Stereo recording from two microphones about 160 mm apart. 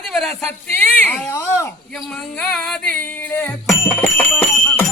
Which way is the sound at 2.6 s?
5° left (ahead or behind).